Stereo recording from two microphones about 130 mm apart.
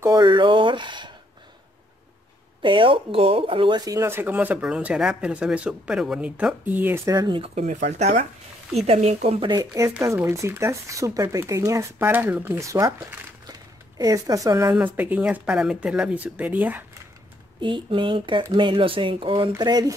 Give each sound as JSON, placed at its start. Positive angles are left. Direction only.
{"t": 0.2, "sound": "speech", "side_deg": -40}
{"t": 2.6, "sound": "speech", "side_deg": -40}
{"t": 7.1, "sound": "speech", "side_deg": -35}
{"t": 7.5, "sound": "speech", "side_deg": -65}
{"t": 8.7, "sound": "speech", "side_deg": -55}
{"t": 9.6, "sound": "speech", "side_deg": -25}
{"t": 13.5, "sound": "a sound", "side_deg": -30}
{"t": 15.0, "sound": "speech", "side_deg": -15}
{"t": 17.6, "sound": "speech", "side_deg": -40}